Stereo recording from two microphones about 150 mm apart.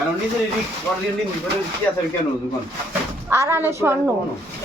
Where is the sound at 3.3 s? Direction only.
15° right (ahead or behind).